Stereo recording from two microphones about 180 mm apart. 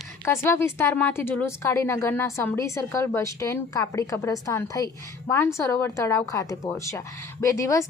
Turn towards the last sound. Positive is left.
turn(degrees=15)  # may be behind; listen again after turning